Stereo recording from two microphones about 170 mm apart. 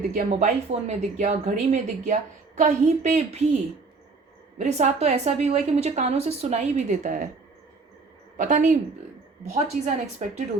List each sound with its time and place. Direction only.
0.0 s a woman's voice: 50° right (ahead or behind)
4.5 s a woman's voice: 40° right (ahead or behind)
8.4 s a woman's voice: 50° right (ahead or behind)